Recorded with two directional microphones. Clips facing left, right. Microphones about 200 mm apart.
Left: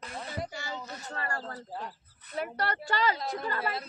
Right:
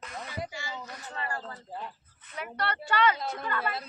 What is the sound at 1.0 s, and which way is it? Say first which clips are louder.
Speech: right 1 dB; 45° left (ahead or behind).